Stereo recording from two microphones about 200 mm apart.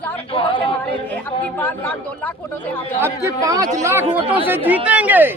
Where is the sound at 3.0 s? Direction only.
15° right (ahead or behind).